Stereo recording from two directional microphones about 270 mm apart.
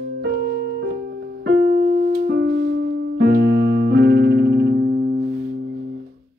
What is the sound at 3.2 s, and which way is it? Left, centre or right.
Keyboard, right.